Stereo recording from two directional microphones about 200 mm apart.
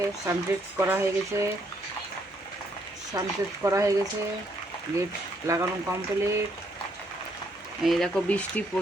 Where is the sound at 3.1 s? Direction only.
15° right (ahead or behind).